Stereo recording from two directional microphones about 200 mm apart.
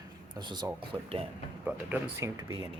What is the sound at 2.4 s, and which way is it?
Speech, 20° right (ahead or behind).